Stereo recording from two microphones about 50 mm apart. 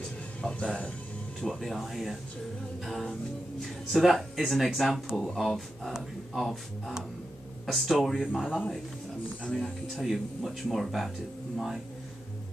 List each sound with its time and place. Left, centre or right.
0.4 s speech: centre
1.4 s speech: centre
7.6 s speech: centre
9.5 s speech: centre